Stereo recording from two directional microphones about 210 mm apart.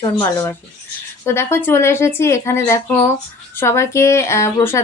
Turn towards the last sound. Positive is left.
turn(degrees=15)  # may be behind; listen again after turning